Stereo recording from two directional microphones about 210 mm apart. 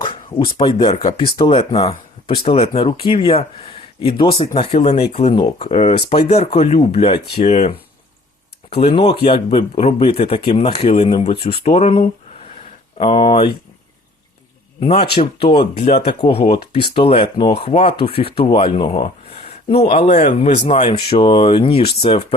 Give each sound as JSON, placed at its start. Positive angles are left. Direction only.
{"t": 0.0, "sound": "a sound", "side_deg": 25}
{"t": 0.5, "sound": "speech", "side_deg": 25}
{"t": 8.8, "sound": "speech", "side_deg": 25}
{"t": 14.8, "sound": "a man's voice", "side_deg": 30}
{"t": 15.4, "sound": "speech", "side_deg": 40}